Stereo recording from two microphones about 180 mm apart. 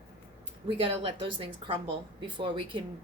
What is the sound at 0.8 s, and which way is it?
A woman's voice, 30° right (ahead or behind).